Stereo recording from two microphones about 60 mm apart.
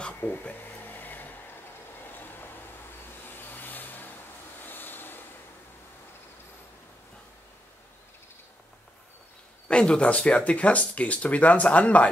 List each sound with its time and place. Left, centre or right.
0.2 s a sound: left
3.3 s vehicle: left
9.7 s speech: centre